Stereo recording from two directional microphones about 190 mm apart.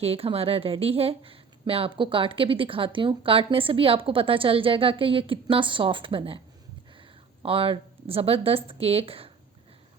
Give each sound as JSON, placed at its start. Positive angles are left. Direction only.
{"t": 0.0, "sound": "a woman's voice", "side_deg": -30}
{"t": 7.4, "sound": "a woman's voice", "side_deg": -30}